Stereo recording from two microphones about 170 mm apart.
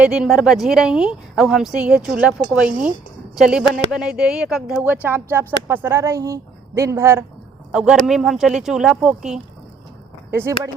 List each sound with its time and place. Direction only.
0.0 s speech: 5° right (ahead or behind)
7.7 s speech: 5° right (ahead or behind)
10.3 s speech: 15° right (ahead or behind)